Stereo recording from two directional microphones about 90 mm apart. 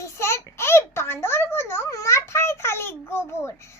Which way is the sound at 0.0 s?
35° left (ahead or behind).